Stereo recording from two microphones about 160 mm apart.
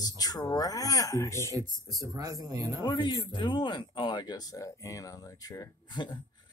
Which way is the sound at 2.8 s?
25° left (ahead or behind).